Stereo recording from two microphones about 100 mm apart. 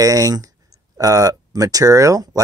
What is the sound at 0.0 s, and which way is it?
Speech, 35° right (ahead or behind).